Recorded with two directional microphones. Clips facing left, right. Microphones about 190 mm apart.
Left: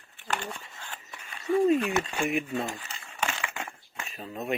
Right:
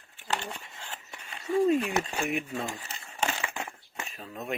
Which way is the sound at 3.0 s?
30° right (ahead or behind).